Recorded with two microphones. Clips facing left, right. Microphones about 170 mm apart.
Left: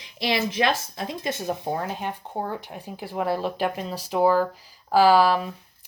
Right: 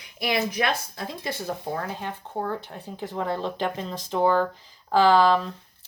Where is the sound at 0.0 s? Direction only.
30° left (ahead or behind).